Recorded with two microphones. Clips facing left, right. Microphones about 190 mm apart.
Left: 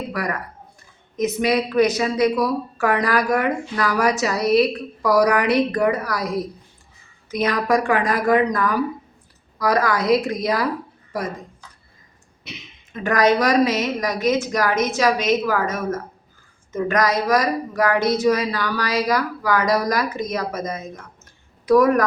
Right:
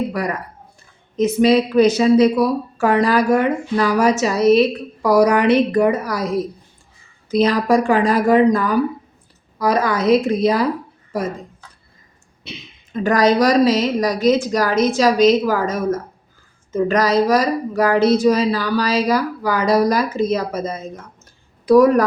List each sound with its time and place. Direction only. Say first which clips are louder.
0.1 s a woman's voice: right 3 dB; 25° right (ahead or behind)
12.5 s a woman's voice: right 3 dB; 35° right (ahead or behind)